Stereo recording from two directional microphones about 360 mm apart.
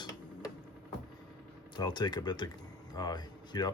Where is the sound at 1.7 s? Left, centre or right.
Centre.